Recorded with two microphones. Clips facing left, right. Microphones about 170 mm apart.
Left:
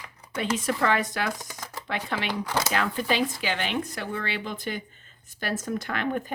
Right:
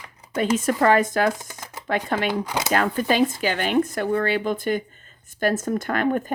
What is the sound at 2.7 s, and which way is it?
Speech, 50° right (ahead or behind).